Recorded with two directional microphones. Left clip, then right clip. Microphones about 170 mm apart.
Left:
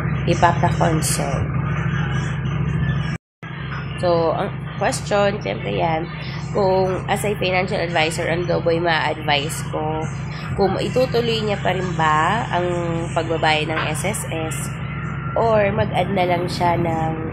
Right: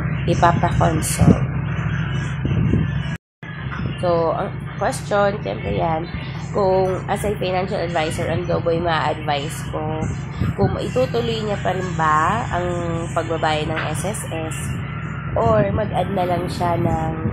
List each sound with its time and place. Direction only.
0.2 s speech: 5° left (ahead or behind)
4.0 s speech: 15° left (ahead or behind)
8.2 s speech: 20° left (ahead or behind)
15.3 s speech: 15° left (ahead or behind)